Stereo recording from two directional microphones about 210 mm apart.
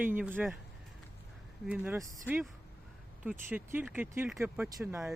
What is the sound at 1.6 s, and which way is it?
Speech, 5° right (ahead or behind).